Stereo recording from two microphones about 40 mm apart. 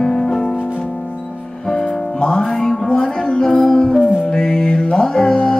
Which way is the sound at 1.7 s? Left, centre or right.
Left.